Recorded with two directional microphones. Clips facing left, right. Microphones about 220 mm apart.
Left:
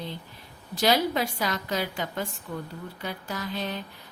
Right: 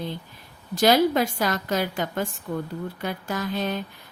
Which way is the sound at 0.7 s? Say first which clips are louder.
Right 5 dB; 50° right (ahead or behind).